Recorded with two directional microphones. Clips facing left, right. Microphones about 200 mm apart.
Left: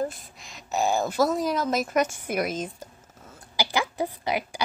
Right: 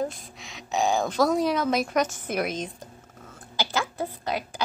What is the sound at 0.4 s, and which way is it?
A woman's voice, centre (ahead or behind).